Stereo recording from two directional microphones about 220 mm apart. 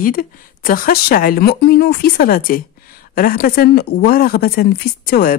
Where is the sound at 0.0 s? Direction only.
40° left (ahead or behind).